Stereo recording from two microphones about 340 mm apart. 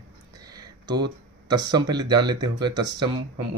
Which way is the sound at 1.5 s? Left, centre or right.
Centre.